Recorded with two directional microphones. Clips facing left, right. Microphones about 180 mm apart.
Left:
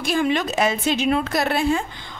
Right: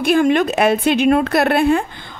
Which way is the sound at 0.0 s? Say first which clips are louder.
Right 7 dB; 55° right (ahead or behind).